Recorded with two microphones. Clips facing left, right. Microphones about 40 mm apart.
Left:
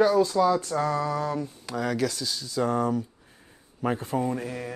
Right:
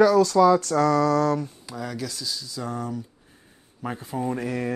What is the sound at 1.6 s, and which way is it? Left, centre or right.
Speech, left.